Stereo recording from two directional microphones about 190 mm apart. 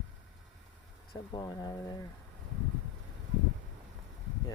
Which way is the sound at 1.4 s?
20° left (ahead or behind).